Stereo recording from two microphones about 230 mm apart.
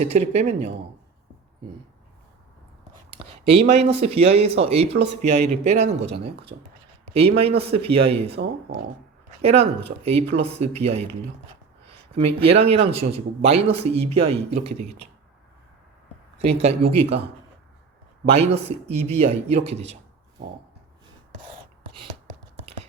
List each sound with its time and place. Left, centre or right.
0.0 s speech: right
3.1 s speech: right
7.1 s speech: right
9.4 s speech: right
12.4 s speech: right
16.4 s speech: right
18.3 s speech: right